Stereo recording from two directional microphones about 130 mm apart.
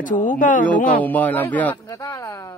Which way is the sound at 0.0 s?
85° left.